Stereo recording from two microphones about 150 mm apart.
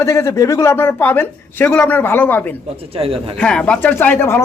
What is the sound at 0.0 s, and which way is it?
Speech, 20° left (ahead or behind).